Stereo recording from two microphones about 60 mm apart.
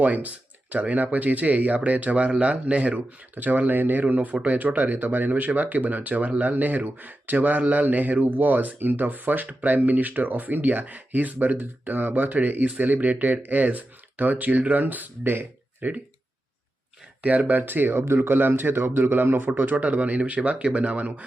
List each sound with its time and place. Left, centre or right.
0.0 s speech: right
17.2 s speech: right